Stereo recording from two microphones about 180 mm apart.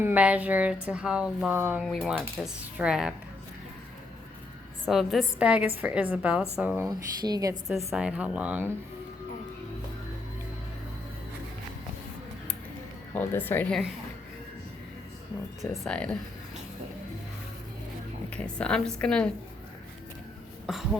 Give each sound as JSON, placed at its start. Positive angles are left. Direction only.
{"t": 0.0, "sound": "speech", "side_deg": -10}
{"t": 1.8, "sound": "speech", "side_deg": 0}
{"t": 4.9, "sound": "speech", "side_deg": 0}
{"t": 6.8, "sound": "speech", "side_deg": -20}
{"t": 7.9, "sound": "speech", "side_deg": -5}
{"t": 13.1, "sound": "a woman's voice", "side_deg": 10}
{"t": 15.7, "sound": "speech", "side_deg": 5}
{"t": 18.3, "sound": "speech", "side_deg": 5}
{"t": 20.7, "sound": "speech", "side_deg": 0}